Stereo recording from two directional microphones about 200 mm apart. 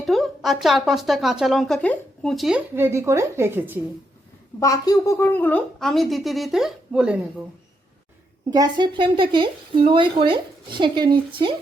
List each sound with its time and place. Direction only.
0.0 s speech: centre (ahead or behind)
2.7 s a woman's voice: 10° right (ahead or behind)
4.6 s a woman's voice: 15° left (ahead or behind); by 7.2 s 5° right (ahead or behind)
8.4 s a woman's voice: 20° right (ahead or behind)